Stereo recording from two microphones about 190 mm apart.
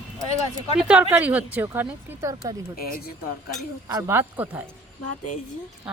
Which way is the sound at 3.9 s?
15° right (ahead or behind).